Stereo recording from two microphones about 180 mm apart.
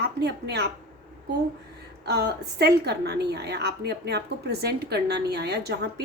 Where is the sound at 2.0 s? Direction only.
65° right (ahead or behind).